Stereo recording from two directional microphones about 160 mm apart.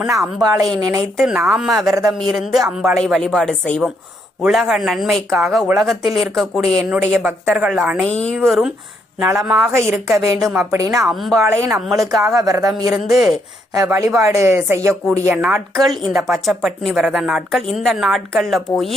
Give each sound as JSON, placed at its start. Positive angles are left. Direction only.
{"t": 0.3, "sound": "a woman's voice", "side_deg": 0}
{"t": 8.0, "sound": "speech", "side_deg": 5}
{"t": 9.2, "sound": "a woman's voice", "side_deg": -15}
{"t": 11.0, "sound": "speech", "side_deg": 0}
{"t": 11.4, "sound": "a woman's voice", "side_deg": -15}
{"t": 13.1, "sound": "speech", "side_deg": 0}
{"t": 13.7, "sound": "a woman's voice", "side_deg": -15}
{"t": 15.4, "sound": "a woman's voice", "side_deg": -5}